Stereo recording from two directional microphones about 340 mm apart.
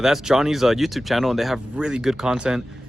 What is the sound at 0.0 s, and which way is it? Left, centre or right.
Speech, centre.